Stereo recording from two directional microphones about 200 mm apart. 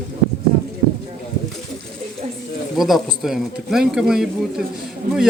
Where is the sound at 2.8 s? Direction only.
Centre (ahead or behind).